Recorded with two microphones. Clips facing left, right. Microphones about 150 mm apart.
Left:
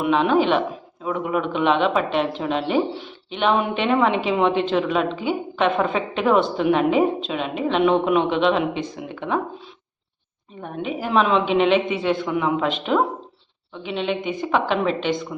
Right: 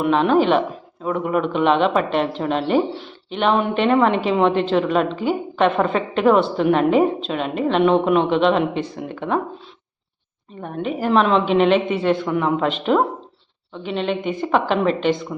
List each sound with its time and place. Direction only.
0.0 s a woman's voice: centre (ahead or behind)
5.1 s a woman's voice: 40° right (ahead or behind)
5.5 s a woman's voice: centre (ahead or behind)
10.6 s a woman's voice: centre (ahead or behind)